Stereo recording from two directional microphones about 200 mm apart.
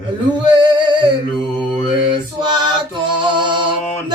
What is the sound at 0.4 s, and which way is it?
Male singing, 20° right (ahead or behind).